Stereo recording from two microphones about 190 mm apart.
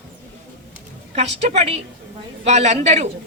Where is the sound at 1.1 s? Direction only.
35° right (ahead or behind).